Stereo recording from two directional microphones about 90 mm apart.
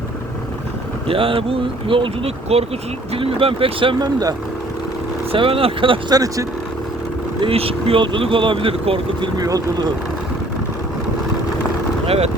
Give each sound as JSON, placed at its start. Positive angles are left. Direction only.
{"t": 1.0, "sound": "speech", "side_deg": -90}
{"t": 4.0, "sound": "speech", "side_deg": -45}
{"t": 5.3, "sound": "speech", "side_deg": -90}
{"t": 6.1, "sound": "speech", "side_deg": -40}
{"t": 7.4, "sound": "speech", "side_deg": -90}
{"t": 9.4, "sound": "speech", "side_deg": -45}